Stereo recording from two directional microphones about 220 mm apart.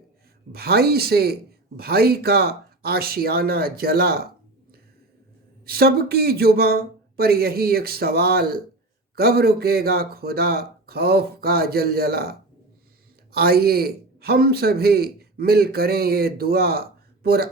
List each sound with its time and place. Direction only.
0.5 s speech: 45° right (ahead or behind)
5.6 s speech: 45° right (ahead or behind)